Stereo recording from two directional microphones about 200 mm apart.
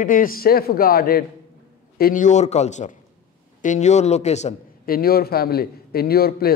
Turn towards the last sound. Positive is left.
turn(degrees=50)  # may be behind; listen again after turning